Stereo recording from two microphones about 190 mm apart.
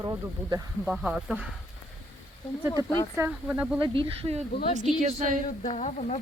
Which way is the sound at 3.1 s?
10° right (ahead or behind).